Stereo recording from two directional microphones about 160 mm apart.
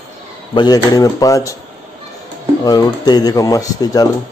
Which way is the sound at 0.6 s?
25° left (ahead or behind).